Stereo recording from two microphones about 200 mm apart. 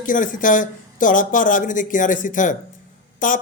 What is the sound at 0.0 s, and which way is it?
Speech, 40° left (ahead or behind).